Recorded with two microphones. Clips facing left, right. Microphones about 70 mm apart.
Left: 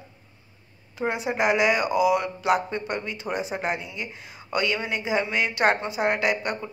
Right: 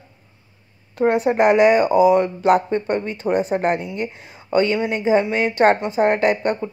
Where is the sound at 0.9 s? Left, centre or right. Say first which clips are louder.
Right 9 dB; right.